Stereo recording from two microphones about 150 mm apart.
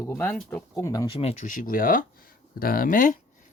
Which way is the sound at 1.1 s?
40° left (ahead or behind).